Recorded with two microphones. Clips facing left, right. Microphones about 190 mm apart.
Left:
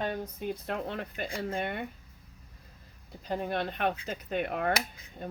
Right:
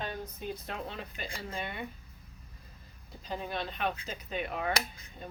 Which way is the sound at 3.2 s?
60° left (ahead or behind).